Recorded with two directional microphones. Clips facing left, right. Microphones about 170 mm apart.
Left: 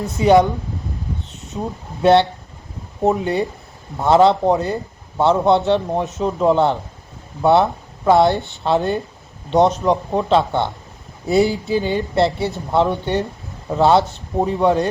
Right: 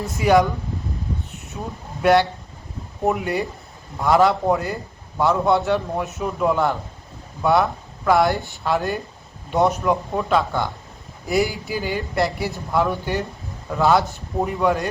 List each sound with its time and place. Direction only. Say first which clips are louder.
0.0 s a man's voice: left 4 dB; 20° left (ahead or behind)
1.5 s a man's voice: left 5 dB; 25° left (ahead or behind)
3.9 s a man's voice: left 4 dB; 25° left (ahead or behind)